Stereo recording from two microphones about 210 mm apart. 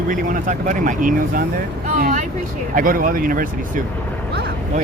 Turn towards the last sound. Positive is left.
turn(degrees=-40)  # may be behind; listen again after turning